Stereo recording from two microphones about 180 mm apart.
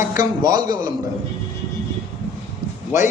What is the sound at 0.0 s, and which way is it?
Speech, 20° right (ahead or behind).